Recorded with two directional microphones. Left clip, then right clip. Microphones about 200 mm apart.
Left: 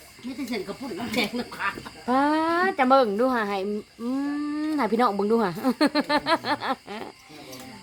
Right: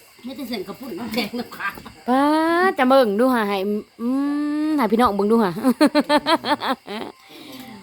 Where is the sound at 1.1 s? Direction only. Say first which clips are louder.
Right 1 dB; 50° right (ahead or behind).